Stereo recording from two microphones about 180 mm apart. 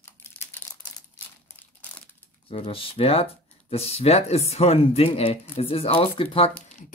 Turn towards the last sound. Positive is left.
turn(degrees=30)  # may be behind; listen again after turning